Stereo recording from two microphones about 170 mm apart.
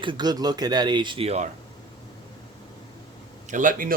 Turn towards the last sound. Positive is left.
turn(degrees=-55)  # may be behind; listen again after turning